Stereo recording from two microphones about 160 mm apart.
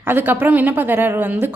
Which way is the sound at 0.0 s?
10° right (ahead or behind).